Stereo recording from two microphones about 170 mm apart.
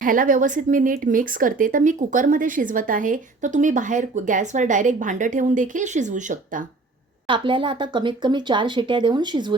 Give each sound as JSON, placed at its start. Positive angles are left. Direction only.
{"t": 0.0, "sound": "speech", "side_deg": -55}
{"t": 7.3, "sound": "speech", "side_deg": -30}